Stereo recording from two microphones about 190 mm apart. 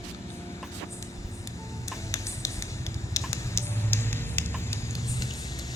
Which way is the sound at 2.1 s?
15° left (ahead or behind).